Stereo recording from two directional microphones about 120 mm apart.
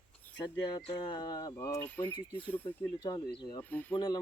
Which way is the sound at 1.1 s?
35° left (ahead or behind).